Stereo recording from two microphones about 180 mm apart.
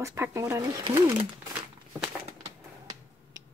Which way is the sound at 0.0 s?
15° right (ahead or behind).